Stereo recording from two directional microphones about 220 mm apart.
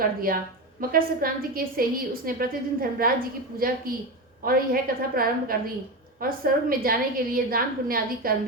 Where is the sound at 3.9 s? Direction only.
40° right (ahead or behind).